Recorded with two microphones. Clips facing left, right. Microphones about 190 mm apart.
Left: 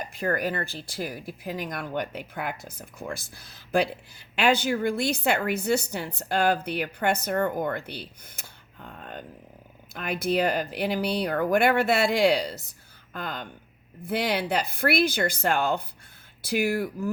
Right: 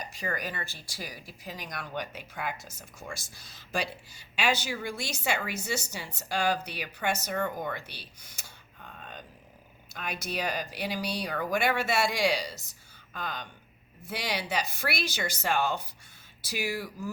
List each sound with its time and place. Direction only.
0.0 s speech: 55° left (ahead or behind)
8.9 s a sound: 55° left (ahead or behind)
9.9 s speech: 55° left (ahead or behind)